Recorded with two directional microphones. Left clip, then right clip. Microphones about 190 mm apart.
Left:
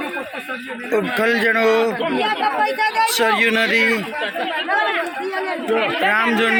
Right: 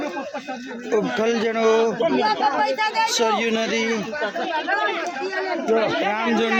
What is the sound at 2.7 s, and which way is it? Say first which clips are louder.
Speech: left 3 dB; 55° right (ahead or behind).